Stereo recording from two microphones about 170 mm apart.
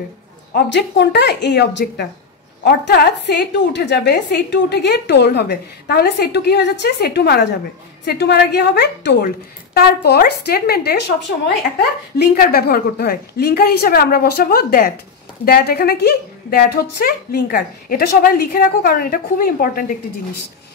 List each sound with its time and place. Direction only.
0.7 s a woman's voice: 85° left
12.2 s a woman's voice: 65° left (ahead or behind)